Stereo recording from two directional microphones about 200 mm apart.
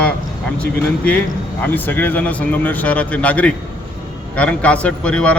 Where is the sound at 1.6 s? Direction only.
10° left (ahead or behind).